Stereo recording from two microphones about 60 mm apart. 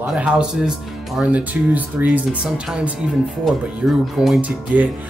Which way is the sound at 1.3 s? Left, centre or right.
Right.